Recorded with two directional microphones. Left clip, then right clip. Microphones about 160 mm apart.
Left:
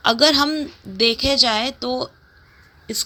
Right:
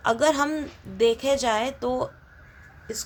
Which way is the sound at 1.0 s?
20° left (ahead or behind).